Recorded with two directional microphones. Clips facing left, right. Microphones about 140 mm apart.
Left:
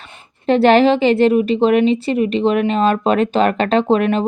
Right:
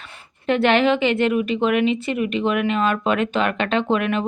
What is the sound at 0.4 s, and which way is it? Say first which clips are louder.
Speech: left 6 dB; 35° left (ahead or behind).